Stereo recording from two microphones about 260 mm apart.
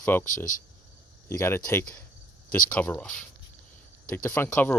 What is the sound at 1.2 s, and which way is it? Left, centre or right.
Speech, centre.